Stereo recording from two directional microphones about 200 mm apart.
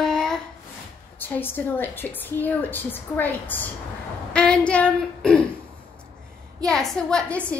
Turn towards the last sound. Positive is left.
turn(degrees=5)  # may be behind; listen again after turning